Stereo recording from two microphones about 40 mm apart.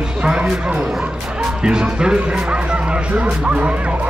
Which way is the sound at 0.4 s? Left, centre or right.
Right.